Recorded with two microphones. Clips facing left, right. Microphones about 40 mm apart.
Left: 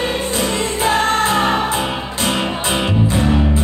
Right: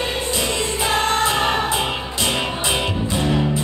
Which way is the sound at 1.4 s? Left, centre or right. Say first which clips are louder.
Left 3 dB; centre.